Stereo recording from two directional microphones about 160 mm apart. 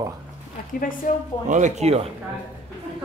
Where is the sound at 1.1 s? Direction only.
55° left (ahead or behind).